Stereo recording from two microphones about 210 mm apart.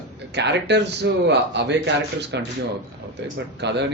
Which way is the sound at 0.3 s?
55° right (ahead or behind).